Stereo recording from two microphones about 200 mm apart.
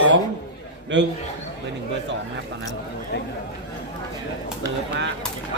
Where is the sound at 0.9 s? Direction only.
65° right (ahead or behind).